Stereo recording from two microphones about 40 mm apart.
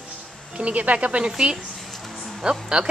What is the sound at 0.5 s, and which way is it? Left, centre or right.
Speech, right.